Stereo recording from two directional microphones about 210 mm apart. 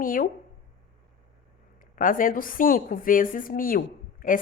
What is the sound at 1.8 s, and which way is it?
A woman's voice, 40° left (ahead or behind).